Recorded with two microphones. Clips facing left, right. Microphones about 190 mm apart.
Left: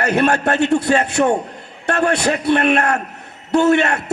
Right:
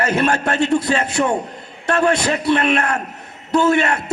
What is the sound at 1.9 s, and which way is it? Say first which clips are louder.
A man's voice: even; 45° left (ahead or behind).